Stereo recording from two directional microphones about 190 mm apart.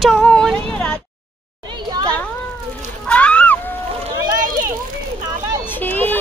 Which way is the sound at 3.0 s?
5° left (ahead or behind).